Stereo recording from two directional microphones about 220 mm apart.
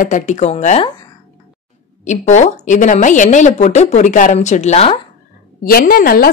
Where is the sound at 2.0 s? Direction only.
35° left (ahead or behind).